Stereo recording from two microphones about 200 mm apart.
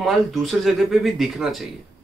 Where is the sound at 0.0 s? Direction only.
Centre (ahead or behind).